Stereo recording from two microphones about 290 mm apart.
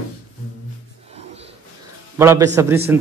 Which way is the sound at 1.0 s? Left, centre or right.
Right.